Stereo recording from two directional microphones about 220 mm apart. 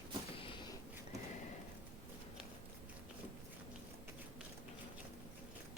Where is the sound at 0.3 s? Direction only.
25° left (ahead or behind).